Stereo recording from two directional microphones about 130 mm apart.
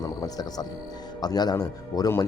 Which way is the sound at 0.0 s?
30° left (ahead or behind).